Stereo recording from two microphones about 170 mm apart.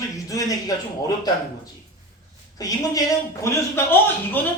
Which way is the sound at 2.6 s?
20° left (ahead or behind).